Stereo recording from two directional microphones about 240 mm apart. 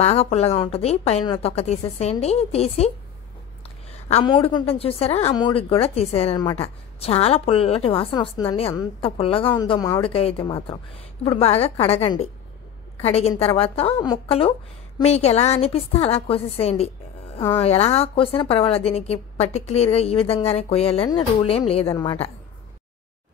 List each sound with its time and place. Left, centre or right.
0.0 s a woman's voice: left